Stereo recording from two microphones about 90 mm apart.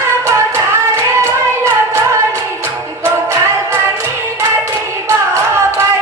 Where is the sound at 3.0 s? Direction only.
30° right (ahead or behind).